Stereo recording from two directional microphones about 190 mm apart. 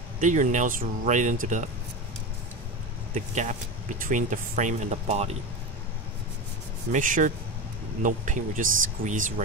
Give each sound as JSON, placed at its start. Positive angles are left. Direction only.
{"t": 0.2, "sound": "speech", "side_deg": -40}
{"t": 3.2, "sound": "speech", "side_deg": -40}
{"t": 6.9, "sound": "speech", "side_deg": -45}